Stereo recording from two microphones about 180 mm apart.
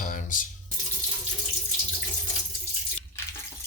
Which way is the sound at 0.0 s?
45° left (ahead or behind).